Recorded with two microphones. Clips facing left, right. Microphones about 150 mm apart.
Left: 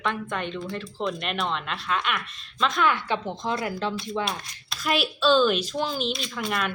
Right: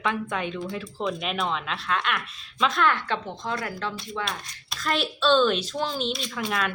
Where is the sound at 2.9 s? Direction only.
15° left (ahead or behind).